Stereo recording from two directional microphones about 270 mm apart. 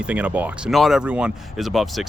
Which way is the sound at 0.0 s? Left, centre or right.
Centre.